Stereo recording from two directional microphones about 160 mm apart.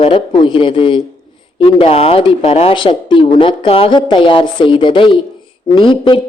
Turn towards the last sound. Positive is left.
turn(degrees=30)  # may be behind; listen again after turning